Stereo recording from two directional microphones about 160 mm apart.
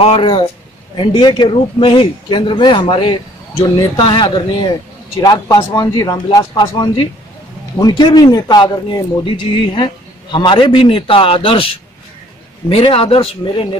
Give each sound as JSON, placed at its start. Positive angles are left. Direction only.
{"t": 0.0, "sound": "speech", "side_deg": 35}